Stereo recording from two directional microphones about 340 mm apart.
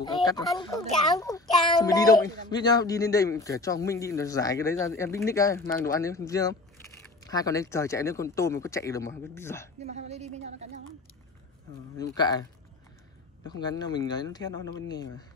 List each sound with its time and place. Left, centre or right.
0.0 s a child's voice: centre
9.8 s a woman's voice: centre
12.0 s a child's voice: centre
13.5 s a child's voice: centre